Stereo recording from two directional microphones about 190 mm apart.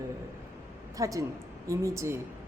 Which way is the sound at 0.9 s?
15° right (ahead or behind).